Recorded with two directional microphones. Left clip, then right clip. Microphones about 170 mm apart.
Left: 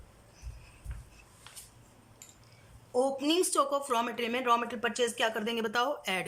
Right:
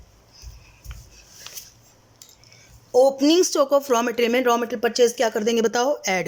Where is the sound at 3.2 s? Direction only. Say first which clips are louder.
Right 10 dB; 40° right (ahead or behind).